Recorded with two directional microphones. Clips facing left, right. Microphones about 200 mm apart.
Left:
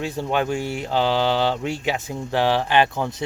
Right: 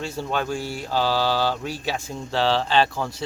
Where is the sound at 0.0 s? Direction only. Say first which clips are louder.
Left 3 dB; 15° left (ahead or behind).